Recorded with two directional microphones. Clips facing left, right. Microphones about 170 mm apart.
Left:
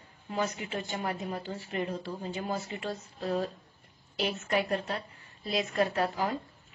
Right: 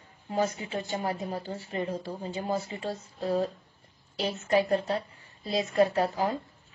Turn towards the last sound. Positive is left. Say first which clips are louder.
# right 3 dB
turn(degrees=-35)  # may be behind; listen again after turning